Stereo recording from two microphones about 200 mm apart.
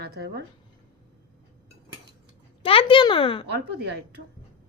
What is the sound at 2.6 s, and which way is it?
Speech, 25° left (ahead or behind).